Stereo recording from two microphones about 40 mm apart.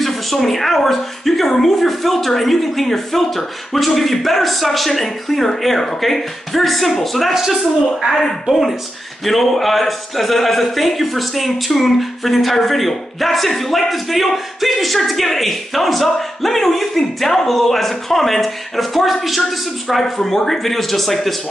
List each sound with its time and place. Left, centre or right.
0.0 s speech: centre
7.3 s a woman's voice: centre
20.0 s speech: centre